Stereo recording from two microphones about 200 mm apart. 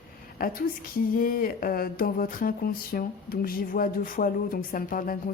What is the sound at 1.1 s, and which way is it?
Speech, 45° left (ahead or behind).